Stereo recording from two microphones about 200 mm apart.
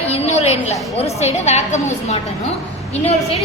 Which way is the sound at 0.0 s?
30° left (ahead or behind).